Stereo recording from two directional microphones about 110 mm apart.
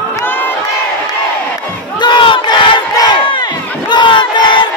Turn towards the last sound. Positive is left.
turn(degrees=45)  # may be behind; listen again after turning